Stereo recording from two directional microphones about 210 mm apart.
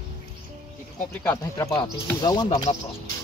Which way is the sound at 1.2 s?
10° left (ahead or behind).